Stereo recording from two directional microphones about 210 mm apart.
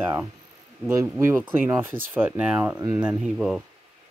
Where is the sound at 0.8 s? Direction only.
10° right (ahead or behind).